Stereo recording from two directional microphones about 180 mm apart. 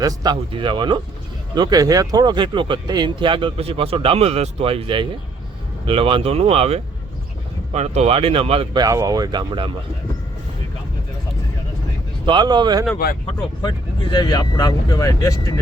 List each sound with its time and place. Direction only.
0.0 s speech: 20° right (ahead or behind)
12.2 s speech: 25° right (ahead or behind)
13.6 s speech: 25° left (ahead or behind)